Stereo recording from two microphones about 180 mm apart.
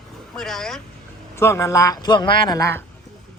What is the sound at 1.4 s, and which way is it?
A man's voice, 15° left (ahead or behind).